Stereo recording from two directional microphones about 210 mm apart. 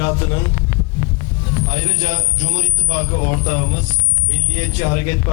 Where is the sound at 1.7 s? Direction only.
10° left (ahead or behind).